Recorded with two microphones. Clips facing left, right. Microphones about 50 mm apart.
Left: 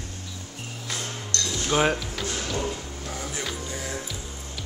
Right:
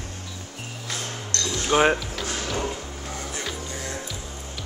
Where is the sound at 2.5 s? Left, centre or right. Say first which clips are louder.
Right 1 dB; centre.